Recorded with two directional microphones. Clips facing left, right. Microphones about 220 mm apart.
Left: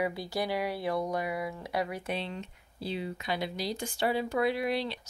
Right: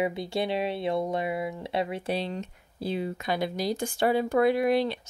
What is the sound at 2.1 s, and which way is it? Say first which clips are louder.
Speech: right 5 dB; 40° right (ahead or behind).